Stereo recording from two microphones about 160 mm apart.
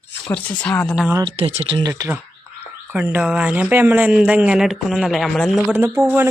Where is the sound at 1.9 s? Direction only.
20° right (ahead or behind); by 5.8 s centre (ahead or behind).